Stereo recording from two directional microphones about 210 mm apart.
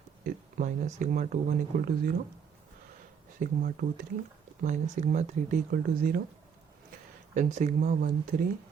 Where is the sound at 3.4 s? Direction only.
40° right (ahead or behind).